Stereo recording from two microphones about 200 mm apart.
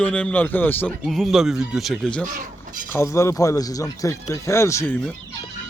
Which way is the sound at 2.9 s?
15° left (ahead or behind).